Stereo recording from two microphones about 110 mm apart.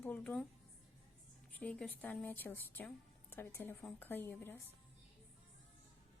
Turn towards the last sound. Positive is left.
turn(degrees=20)  # may be behind; listen again after turning